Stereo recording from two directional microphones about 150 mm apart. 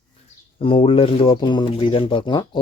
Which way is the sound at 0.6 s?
40° left (ahead or behind).